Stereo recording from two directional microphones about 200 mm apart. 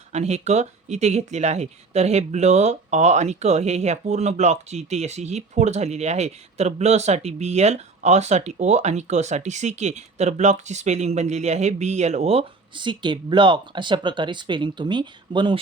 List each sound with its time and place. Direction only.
0.1 s speech: 35° right (ahead or behind)